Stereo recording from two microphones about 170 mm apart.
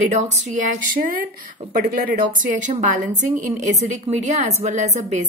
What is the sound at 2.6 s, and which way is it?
Speech, 50° right (ahead or behind).